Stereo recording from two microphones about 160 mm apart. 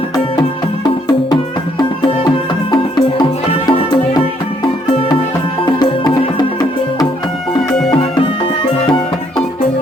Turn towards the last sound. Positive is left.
turn(degrees=5)  # may be behind; listen again after turning